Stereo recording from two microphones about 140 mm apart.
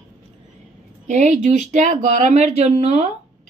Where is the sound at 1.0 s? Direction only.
60° right (ahead or behind).